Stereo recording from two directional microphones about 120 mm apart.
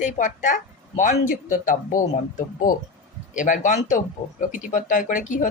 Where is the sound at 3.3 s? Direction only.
90° left.